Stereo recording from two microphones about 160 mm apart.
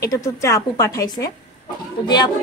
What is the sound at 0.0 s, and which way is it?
A woman's voice, 20° left (ahead or behind).